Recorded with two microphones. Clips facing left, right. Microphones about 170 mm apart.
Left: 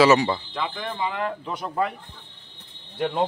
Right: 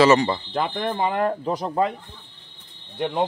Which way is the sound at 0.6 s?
55° right (ahead or behind).